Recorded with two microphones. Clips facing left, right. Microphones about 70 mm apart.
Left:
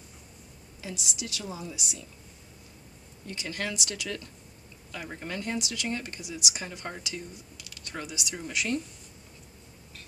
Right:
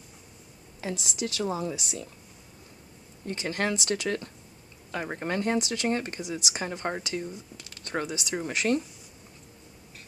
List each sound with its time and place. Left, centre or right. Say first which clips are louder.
0.7 s a woman's voice: right 6 dB; right
3.3 s speech: right 6 dB; right